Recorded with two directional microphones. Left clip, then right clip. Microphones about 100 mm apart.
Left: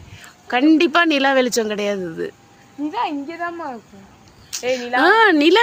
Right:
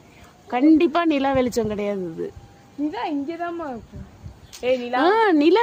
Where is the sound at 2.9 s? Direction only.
25° right (ahead or behind).